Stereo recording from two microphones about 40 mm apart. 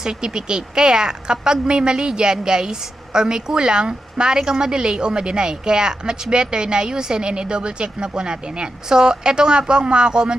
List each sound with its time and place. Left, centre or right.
0.0 s speech: centre